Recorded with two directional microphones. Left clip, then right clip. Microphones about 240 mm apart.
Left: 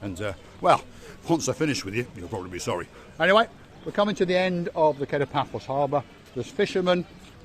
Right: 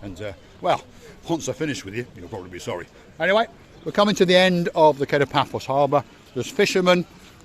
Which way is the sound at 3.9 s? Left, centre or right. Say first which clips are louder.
Right 6 dB; right.